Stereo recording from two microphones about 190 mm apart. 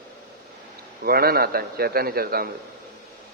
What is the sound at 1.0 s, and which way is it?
A man's voice, 55° right (ahead or behind).